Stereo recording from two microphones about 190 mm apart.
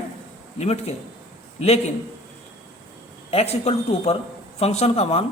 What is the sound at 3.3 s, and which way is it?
A man's voice, 35° left (ahead or behind).